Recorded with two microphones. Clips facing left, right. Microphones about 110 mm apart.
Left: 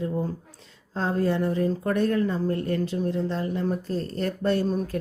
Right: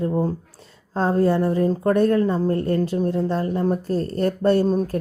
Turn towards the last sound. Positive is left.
turn(degrees=-35)  # may be behind; listen again after turning